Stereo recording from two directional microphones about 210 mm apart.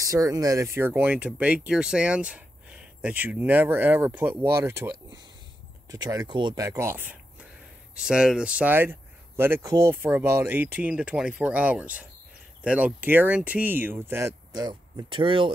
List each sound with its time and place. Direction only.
0.0 s speech: 15° right (ahead or behind)